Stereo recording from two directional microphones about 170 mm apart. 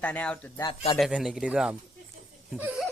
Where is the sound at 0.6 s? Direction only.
35° left (ahead or behind).